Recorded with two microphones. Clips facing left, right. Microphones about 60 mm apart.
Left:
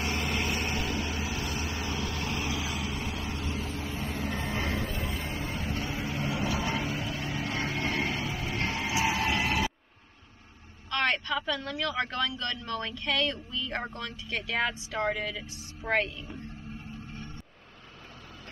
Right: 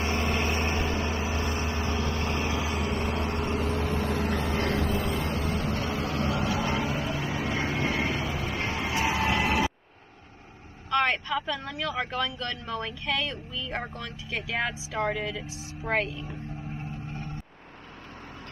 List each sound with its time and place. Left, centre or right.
0.0 s vehicle: right
4.6 s vehicle: right
6.1 s vehicle: centre
10.9 s speech: centre